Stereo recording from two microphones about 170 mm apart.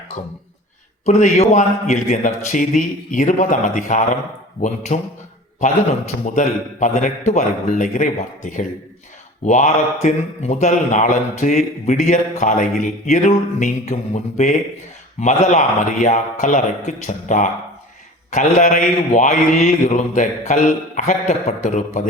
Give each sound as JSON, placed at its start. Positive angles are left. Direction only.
{"t": 1.0, "sound": "speech", "side_deg": 45}
{"t": 6.2, "sound": "speech", "side_deg": 45}